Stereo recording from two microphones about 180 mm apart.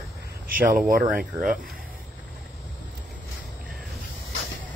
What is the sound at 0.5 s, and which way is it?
Speech, 50° right (ahead or behind).